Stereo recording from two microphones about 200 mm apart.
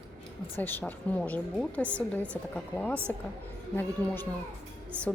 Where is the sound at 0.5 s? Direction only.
10° left (ahead or behind).